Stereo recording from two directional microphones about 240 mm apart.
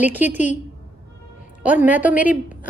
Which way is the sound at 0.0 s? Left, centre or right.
Centre.